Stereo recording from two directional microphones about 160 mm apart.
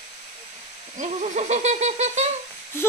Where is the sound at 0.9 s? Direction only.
45° right (ahead or behind).